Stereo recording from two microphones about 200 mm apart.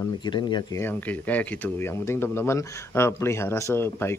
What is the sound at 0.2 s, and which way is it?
Speech, 20° left (ahead or behind).